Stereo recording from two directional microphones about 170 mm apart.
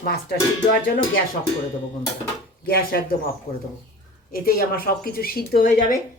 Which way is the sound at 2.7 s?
60° left (ahead or behind).